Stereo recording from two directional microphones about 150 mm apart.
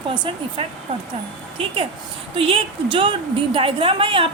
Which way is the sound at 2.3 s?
40° right (ahead or behind).